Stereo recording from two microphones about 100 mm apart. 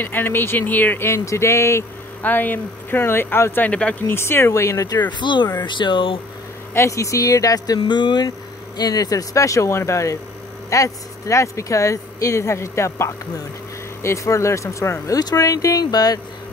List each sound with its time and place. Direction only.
0.0 s speech: 20° left (ahead or behind)
3.6 s speech: 10° left (ahead or behind)
4.1 s speech: 25° left (ahead or behind)
5.2 s speech: 50° left (ahead or behind)
6.7 s speech: 30° left (ahead or behind); by 8.3 s 50° left (ahead or behind)
8.7 s speech: 40° left (ahead or behind)